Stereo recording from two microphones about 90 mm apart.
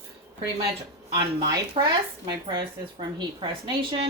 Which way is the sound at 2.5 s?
60° right (ahead or behind).